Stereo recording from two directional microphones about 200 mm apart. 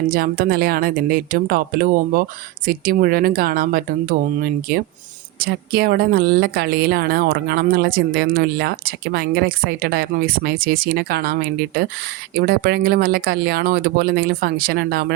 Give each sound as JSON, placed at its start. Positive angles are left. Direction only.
{"t": 0.1, "sound": "speech", "side_deg": -45}